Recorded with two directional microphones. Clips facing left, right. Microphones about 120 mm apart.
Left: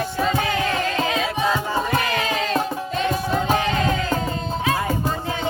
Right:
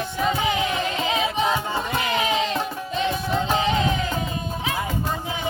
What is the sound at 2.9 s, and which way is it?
Music, 20° right (ahead or behind).